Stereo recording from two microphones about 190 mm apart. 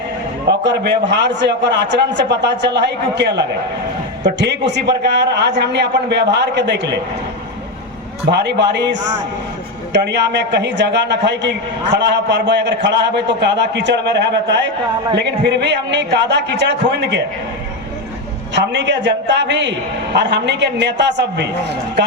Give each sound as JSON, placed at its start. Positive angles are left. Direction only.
{"t": 0.4, "sound": "a man's voice", "side_deg": -65}
{"t": 8.3, "sound": "a man's voice", "side_deg": -65}
{"t": 18.5, "sound": "a man's voice", "side_deg": -65}